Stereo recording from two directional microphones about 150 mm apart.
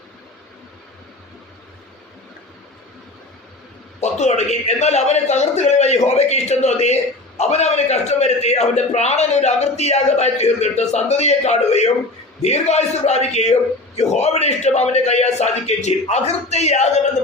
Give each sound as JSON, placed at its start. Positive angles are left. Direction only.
{"t": 4.0, "sound": "a man's voice", "side_deg": 50}